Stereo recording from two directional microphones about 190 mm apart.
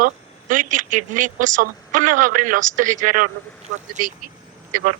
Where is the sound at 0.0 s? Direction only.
45° right (ahead or behind).